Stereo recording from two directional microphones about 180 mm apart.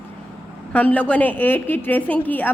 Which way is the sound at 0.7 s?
10° left (ahead or behind).